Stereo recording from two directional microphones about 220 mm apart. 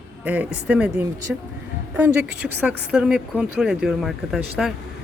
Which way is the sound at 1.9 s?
5° right (ahead or behind).